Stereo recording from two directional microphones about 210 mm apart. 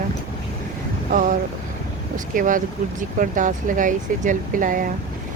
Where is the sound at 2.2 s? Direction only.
40° right (ahead or behind).